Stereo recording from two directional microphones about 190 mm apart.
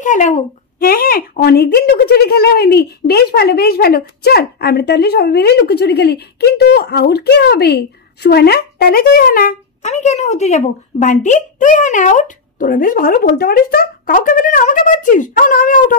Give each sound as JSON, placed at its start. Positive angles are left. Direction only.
{"t": 0.0, "sound": "speech", "side_deg": 40}
{"t": 9.8, "sound": "speech", "side_deg": 35}